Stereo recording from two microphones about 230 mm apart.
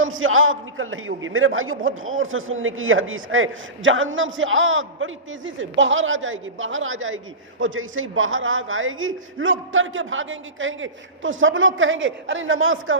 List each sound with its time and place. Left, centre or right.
0.0 s a man's voice: right